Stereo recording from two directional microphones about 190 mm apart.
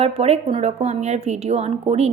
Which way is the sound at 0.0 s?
30° right (ahead or behind).